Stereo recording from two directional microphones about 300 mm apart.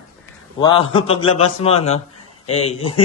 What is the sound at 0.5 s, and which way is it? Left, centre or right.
A man's voice, centre.